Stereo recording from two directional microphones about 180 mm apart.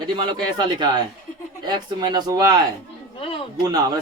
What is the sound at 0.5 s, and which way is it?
Speech, 25° right (ahead or behind).